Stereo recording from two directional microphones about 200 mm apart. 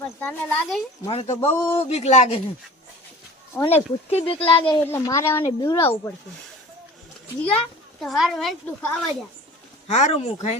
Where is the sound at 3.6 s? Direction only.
30° left (ahead or behind).